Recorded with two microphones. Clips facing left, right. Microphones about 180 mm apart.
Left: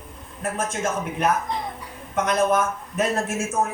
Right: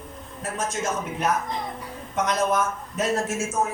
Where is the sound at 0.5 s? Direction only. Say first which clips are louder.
Left 1 dB; 55° left (ahead or behind).